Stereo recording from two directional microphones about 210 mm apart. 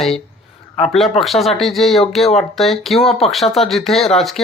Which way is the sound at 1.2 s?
Centre (ahead or behind).